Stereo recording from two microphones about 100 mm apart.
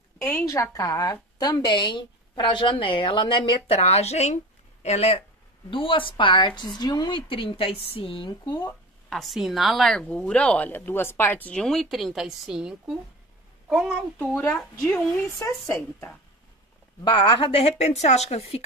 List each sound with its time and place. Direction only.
0.2 s a woman's voice: 20° left (ahead or behind)
0.5 s a woman's voice: 35° left (ahead or behind); by 3.5 s 55° left (ahead or behind)
3.6 s speech: 90° left
5.7 s a woman's voice: 60° left (ahead or behind); by 7.2 s 40° left (ahead or behind)
7.2 s a woman's voice: 60° left (ahead or behind)
8.3 s a woman's voice: 45° left (ahead or behind)
9.1 s a child's voice: centre (ahead or behind)
14.1 s speech: 20° left (ahead or behind)
14.5 s speech: 5° left (ahead or behind)
15.4 s a woman's voice: 30° left (ahead or behind)
17.0 s a woman's voice: 55° left (ahead or behind); by 18.6 s 90° left